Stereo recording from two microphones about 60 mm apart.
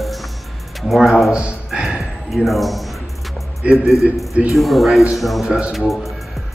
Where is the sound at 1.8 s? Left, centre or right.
Centre.